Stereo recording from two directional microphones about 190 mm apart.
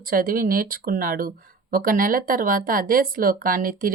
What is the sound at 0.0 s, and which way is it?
Speech, 50° right (ahead or behind).